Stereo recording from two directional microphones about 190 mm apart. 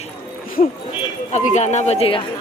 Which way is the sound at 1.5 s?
35° left (ahead or behind).